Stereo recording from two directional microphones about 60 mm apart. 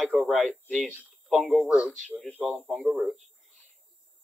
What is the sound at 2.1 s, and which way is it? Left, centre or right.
Speech, centre.